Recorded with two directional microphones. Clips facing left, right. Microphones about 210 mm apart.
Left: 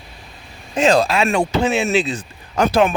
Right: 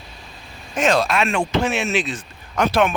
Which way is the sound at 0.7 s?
30° left (ahead or behind).